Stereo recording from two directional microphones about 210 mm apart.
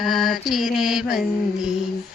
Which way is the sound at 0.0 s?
Centre (ahead or behind).